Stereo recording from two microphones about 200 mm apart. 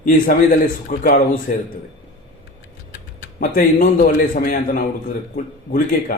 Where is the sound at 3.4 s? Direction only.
45° left (ahead or behind).